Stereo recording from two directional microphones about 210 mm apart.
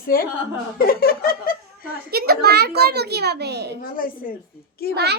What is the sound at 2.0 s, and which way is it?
A child's voice, 45° right (ahead or behind).